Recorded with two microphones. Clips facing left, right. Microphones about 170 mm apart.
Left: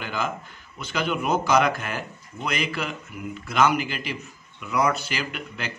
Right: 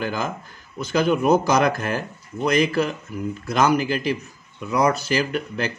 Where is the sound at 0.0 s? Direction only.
40° right (ahead or behind).